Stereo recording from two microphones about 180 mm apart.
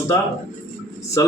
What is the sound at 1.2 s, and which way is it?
Speech, 20° left (ahead or behind).